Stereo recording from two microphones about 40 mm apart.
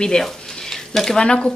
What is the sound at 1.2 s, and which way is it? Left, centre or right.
Speech, left.